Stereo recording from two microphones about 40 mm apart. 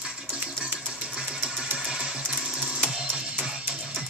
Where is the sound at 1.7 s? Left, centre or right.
Centre.